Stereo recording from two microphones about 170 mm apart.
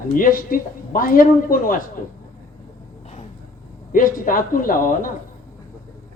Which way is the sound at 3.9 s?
55° left (ahead or behind).